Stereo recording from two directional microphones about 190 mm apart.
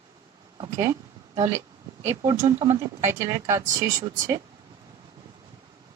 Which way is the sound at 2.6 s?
25° right (ahead or behind).